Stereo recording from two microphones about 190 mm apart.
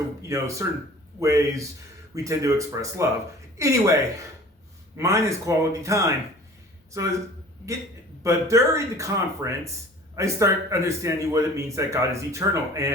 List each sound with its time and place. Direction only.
0.3 s speech: 15° right (ahead or behind)
4.9 s speech: 15° right (ahead or behind)
8.2 s speech: 15° right (ahead or behind)